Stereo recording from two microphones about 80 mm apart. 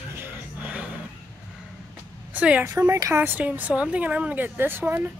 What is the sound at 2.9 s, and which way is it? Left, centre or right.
Speech, right.